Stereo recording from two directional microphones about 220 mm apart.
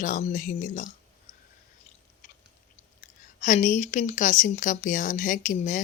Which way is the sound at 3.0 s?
35° left (ahead or behind).